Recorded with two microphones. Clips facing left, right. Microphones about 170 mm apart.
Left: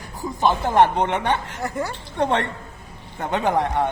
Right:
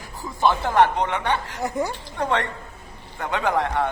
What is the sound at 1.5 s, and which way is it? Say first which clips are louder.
Speech: right 1 dB; 15° right (ahead or behind).